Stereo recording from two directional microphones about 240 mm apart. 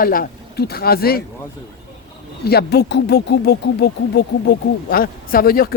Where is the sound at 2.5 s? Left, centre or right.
Left.